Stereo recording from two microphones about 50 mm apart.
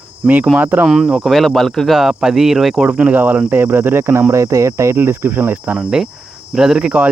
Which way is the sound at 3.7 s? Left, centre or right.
Right.